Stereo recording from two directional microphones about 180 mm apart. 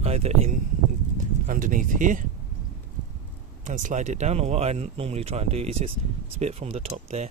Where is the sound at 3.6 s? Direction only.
45° right (ahead or behind).